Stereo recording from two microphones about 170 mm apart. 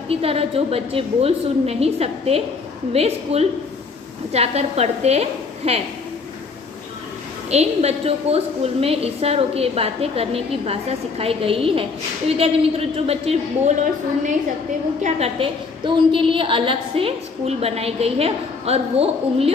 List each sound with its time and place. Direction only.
0.1 s a woman's voice: 35° right (ahead or behind)
7.5 s a woman's voice: 40° right (ahead or behind)
15.0 s a woman's voice: 35° right (ahead or behind)